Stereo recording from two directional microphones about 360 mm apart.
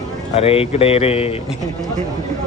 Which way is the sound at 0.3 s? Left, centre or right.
Centre.